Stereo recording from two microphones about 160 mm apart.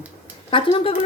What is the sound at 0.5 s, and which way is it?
Speech, 35° left (ahead or behind).